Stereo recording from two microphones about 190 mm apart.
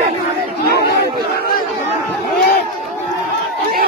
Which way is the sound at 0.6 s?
60° left (ahead or behind).